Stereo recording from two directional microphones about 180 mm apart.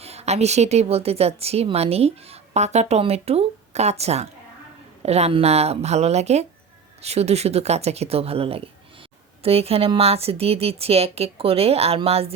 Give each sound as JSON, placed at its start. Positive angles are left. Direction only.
{"t": 0.0, "sound": "a woman's voice", "side_deg": -35}